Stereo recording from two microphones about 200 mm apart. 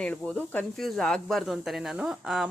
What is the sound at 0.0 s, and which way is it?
Speech, 5° left (ahead or behind).